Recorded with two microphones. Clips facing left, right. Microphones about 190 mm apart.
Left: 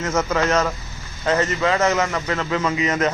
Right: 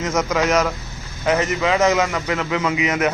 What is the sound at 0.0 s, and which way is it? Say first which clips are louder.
A man's voice: right 1 dB; 15° right (ahead or behind).